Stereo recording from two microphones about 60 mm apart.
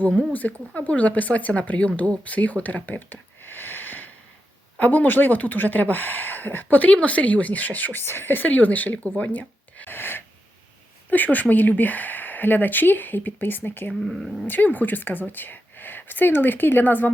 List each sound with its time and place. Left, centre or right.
0.3 s speech: left
14.0 s speech: centre
14.4 s speech: left